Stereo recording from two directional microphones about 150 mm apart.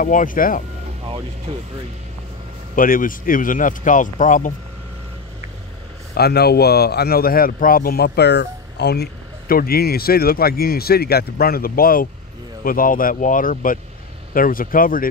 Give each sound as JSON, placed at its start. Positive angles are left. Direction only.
{"t": 0.0, "sound": "speech", "side_deg": 65}
{"t": 1.0, "sound": "speech", "side_deg": -40}
{"t": 2.7, "sound": "speech", "side_deg": 65}
{"t": 6.1, "sound": "speech", "side_deg": 90}